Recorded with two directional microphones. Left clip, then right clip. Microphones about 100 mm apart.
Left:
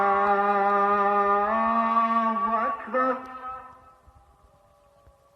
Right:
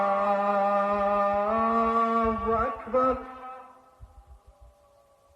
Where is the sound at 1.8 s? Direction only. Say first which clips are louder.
Left 2 dB; 15° right (ahead or behind).